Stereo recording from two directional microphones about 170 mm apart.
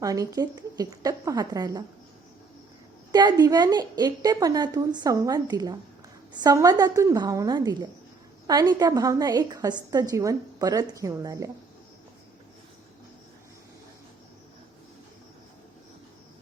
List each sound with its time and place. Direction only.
0.0 s a woman's voice: 20° right (ahead or behind)
3.1 s a woman's voice: 25° right (ahead or behind)